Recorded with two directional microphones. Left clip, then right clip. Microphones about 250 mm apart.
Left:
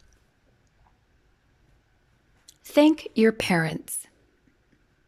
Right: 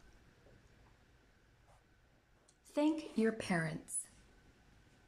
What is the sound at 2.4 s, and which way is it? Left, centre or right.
Speech, left.